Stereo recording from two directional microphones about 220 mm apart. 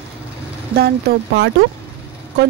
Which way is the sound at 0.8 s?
45° right (ahead or behind).